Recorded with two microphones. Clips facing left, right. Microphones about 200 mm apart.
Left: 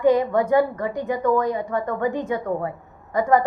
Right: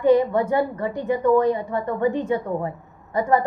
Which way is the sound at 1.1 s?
25° right (ahead or behind).